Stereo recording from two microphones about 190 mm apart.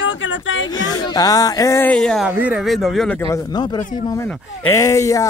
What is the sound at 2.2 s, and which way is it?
Speech, 5° right (ahead or behind).